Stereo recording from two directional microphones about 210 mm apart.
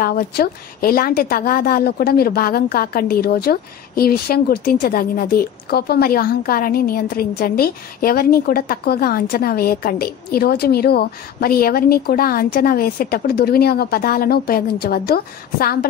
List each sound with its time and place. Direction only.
0.0 s a woman's voice: 45° left (ahead or behind)